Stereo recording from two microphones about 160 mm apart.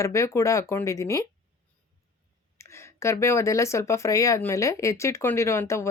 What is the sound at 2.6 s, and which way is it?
Speech, 15° left (ahead or behind).